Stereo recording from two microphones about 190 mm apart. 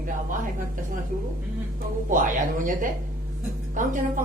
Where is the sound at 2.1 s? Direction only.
45° right (ahead or behind).